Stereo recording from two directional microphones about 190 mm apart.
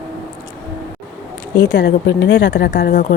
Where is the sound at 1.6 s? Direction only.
65° left (ahead or behind).